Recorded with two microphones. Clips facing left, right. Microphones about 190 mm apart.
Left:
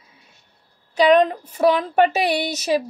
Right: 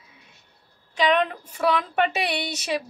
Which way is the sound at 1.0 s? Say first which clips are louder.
Left 7 dB; 40° left (ahead or behind).